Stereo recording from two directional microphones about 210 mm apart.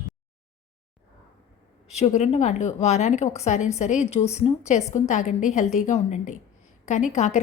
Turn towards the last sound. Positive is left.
turn(degrees=35)  # may be behind; listen again after turning